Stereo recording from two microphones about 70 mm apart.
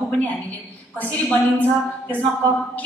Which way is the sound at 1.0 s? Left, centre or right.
Left.